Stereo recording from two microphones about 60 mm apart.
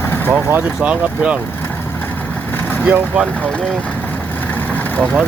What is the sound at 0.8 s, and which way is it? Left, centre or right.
Speech, right.